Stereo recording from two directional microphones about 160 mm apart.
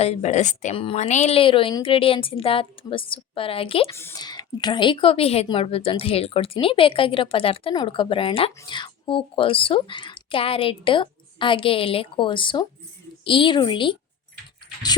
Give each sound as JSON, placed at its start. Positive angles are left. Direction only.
{"t": 0.0, "sound": "a woman's voice", "side_deg": 40}
{"t": 3.9, "sound": "a woman's voice", "side_deg": 20}